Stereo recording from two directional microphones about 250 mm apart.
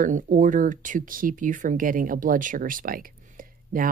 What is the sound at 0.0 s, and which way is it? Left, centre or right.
Speech, right.